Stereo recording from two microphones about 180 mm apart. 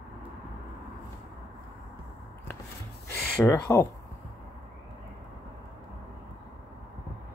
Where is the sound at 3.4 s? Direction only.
15° left (ahead or behind).